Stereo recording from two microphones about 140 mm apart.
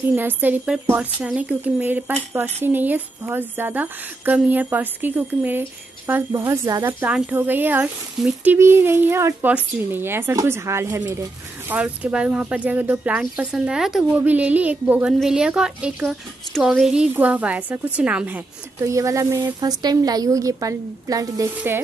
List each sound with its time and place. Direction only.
0.1 s a woman's voice: 15° right (ahead or behind)
6.9 s a woman's voice: 10° right (ahead or behind)